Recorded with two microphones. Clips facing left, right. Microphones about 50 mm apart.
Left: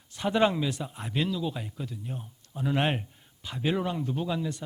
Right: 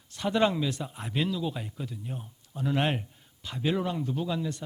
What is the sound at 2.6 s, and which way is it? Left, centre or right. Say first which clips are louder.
A man's voice: even; centre.